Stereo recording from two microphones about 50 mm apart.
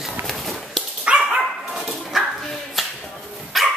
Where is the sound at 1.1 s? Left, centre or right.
Right.